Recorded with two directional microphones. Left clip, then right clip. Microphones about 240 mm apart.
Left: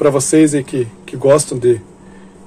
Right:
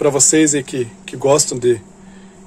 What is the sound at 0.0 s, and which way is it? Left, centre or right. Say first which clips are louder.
Speech: left 2 dB; centre.